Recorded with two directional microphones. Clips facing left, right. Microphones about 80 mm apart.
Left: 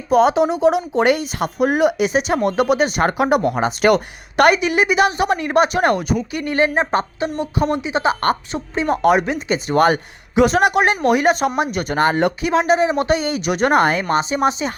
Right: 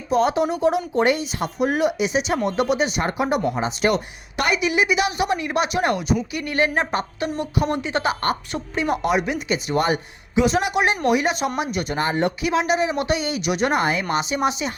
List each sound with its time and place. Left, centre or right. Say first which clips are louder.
0.1 s speech: left 5 dB; left
3.1 s speech: left 5 dB; left
4.6 s speech: left 4 dB; left
6.3 s speech: left 7 dB; left
9.0 s speech: left 6 dB; left
9.8 s speech: left 6 dB; left
12.4 s speech: left 4 dB; left
14.1 s speech: left 4 dB; left